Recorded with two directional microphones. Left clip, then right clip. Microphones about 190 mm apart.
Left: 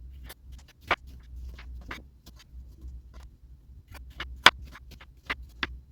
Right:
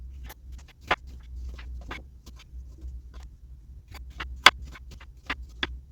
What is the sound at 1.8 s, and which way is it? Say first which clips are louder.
Hum: right 1 dB; 10° left (ahead or behind).